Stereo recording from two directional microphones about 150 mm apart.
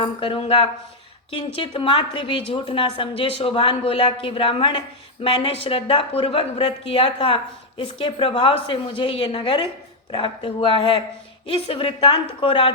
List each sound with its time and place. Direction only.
0.0 s a woman's voice: 35° left (ahead or behind)